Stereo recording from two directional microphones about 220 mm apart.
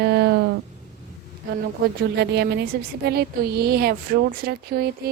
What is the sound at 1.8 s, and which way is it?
Speech, 45° right (ahead or behind).